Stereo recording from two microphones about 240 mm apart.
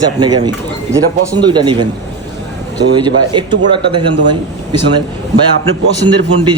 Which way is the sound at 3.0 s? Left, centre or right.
Centre.